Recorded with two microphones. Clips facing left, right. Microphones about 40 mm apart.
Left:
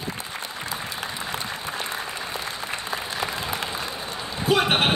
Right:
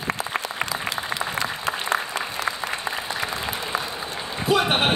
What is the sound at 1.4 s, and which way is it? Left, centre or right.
Applause, right.